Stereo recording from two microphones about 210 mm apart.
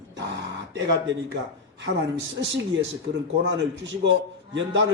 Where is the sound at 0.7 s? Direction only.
60° right (ahead or behind).